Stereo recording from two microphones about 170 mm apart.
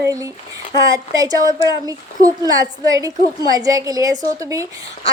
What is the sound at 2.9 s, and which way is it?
A woman's voice, 20° right (ahead or behind).